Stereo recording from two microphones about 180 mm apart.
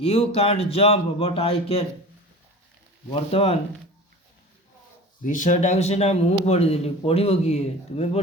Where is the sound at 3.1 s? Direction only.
35° left (ahead or behind).